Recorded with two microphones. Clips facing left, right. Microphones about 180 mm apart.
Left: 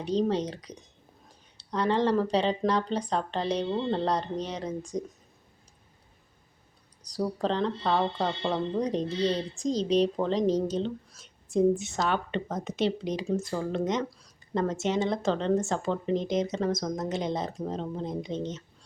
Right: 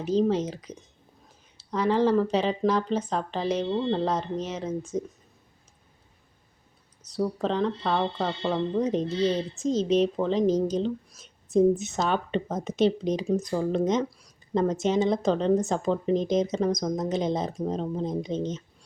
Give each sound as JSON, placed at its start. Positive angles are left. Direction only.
{"t": 0.1, "sound": "speech", "side_deg": -5}
{"t": 7.2, "sound": "speech", "side_deg": 0}
{"t": 11.5, "sound": "speech", "side_deg": -20}